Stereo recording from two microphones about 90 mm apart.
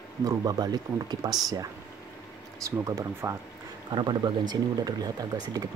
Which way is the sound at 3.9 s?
60° right (ahead or behind).